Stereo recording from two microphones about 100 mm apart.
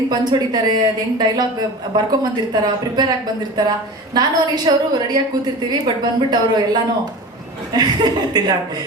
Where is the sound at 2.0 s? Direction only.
45° right (ahead or behind).